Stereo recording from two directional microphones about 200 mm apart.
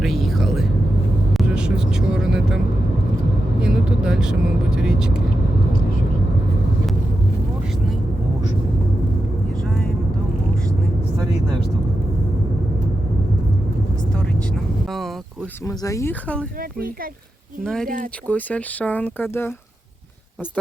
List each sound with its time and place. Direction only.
0.0 s a sound: centre (ahead or behind)
1.3 s vehicle: centre (ahead or behind)
3.6 s vehicle: 5° right (ahead or behind)
9.6 s vehicle: 5° left (ahead or behind)
14.8 s a sound: centre (ahead or behind)
15.6 s speech: 15° left (ahead or behind)
16.6 s speech: 45° right (ahead or behind)
17.6 s speech: 5° left (ahead or behind)
17.8 s speech: 40° right (ahead or behind)
18.3 s speech: 10° left (ahead or behind)